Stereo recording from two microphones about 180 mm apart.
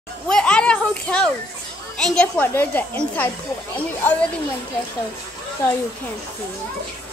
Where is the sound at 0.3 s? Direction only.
5° left (ahead or behind).